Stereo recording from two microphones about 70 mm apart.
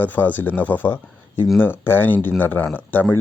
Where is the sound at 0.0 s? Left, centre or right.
Left.